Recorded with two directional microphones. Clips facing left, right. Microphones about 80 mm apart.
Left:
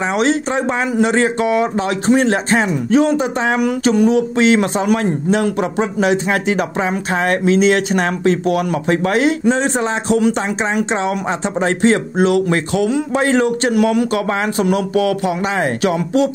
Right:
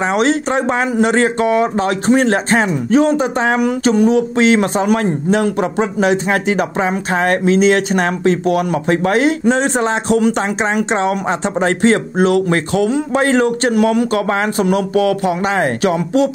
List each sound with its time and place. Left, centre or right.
0.0 s speech: right
9.5 s a man's voice: right